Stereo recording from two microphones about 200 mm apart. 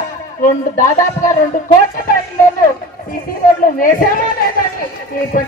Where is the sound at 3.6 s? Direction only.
45° left (ahead or behind).